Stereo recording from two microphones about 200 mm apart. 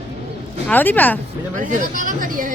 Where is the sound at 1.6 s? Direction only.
40° right (ahead or behind).